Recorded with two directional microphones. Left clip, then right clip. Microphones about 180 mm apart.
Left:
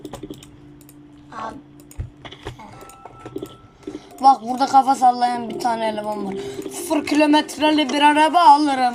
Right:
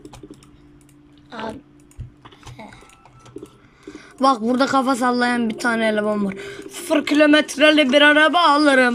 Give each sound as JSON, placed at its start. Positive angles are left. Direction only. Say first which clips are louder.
{"t": 3.9, "sound": "speech", "louder": "left 3 dB", "side_deg": -55}